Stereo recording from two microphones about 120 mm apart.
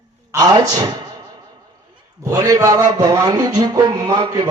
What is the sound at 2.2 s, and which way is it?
A man's voice, 30° right (ahead or behind).